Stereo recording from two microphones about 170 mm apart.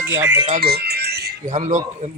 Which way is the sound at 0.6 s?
65° right (ahead or behind).